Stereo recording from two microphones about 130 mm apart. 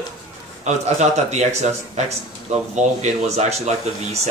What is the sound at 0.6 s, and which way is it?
Speech, 60° right (ahead or behind).